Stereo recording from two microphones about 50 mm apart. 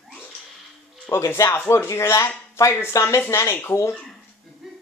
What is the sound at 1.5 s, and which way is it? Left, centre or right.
Speech, left.